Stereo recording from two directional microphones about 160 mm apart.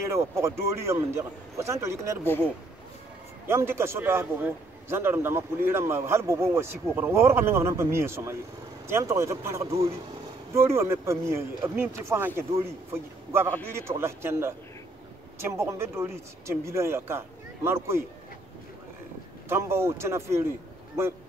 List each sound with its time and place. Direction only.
0.1 s a man's voice: 15° right (ahead or behind)
3.4 s a man's voice: 15° right (ahead or behind)
19.5 s a man's voice: 15° right (ahead or behind)